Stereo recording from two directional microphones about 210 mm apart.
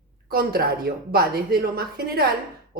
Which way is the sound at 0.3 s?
45° right (ahead or behind).